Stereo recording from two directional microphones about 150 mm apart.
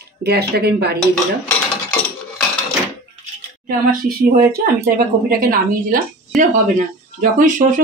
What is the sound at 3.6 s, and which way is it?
A woman's voice, 70° right (ahead or behind).